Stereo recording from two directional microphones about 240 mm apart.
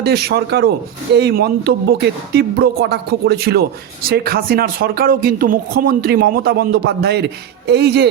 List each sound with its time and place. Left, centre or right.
0.0 s speech: right